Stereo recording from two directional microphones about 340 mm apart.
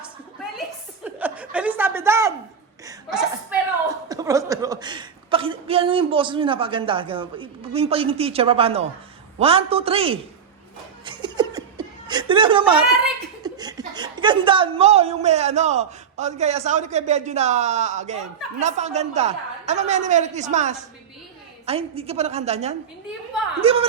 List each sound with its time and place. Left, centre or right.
1.0 s chuckle: centre
4.1 s a man's voice: centre
11.0 s laughter: centre
13.4 s a woman's voice: centre